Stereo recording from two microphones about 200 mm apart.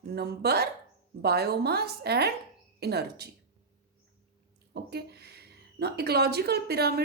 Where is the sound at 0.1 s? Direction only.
55° right (ahead or behind).